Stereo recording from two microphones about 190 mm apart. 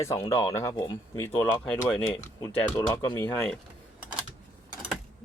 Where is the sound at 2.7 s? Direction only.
20° left (ahead or behind).